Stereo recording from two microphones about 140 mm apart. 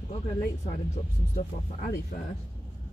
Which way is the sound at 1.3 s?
70° left (ahead or behind).